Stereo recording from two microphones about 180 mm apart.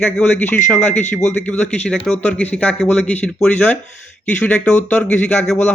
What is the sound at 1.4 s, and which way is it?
Speech, 5° left (ahead or behind).